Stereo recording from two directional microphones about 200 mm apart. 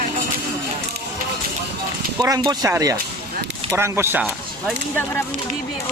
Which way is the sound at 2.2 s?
20° right (ahead or behind).